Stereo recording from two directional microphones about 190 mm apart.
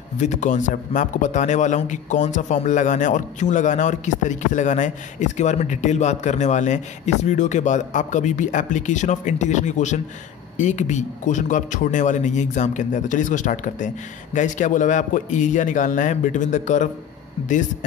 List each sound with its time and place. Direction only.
0.2 s speech: 40° left (ahead or behind)